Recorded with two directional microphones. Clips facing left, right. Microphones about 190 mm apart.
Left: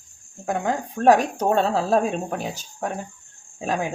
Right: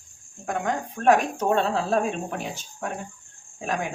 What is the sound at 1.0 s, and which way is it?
Speech, 35° left (ahead or behind).